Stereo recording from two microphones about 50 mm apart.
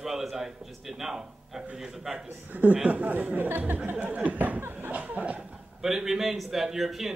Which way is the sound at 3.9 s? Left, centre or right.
Right.